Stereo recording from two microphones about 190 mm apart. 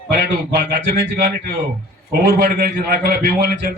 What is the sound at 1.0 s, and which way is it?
A man's voice, 55° right (ahead or behind).